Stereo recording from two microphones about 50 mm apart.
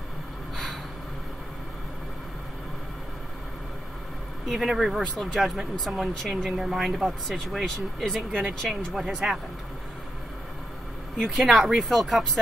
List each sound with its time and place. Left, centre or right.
4.5 s speech: centre
8.3 s speech: right
9.1 s speech: centre
11.2 s speech: centre